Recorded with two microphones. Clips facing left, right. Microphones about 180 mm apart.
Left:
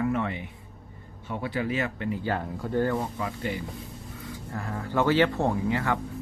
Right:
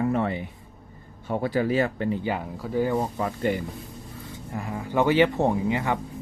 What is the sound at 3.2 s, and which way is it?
Speech, 40° right (ahead or behind).